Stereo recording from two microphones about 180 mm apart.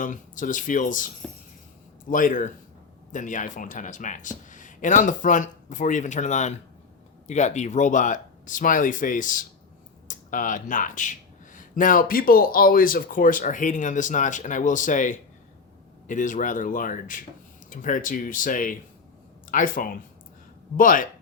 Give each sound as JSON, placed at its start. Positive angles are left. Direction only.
{"t": 0.0, "sound": "speech", "side_deg": 45}